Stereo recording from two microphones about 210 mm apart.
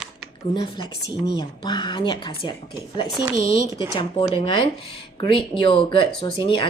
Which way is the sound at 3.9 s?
25° left (ahead or behind).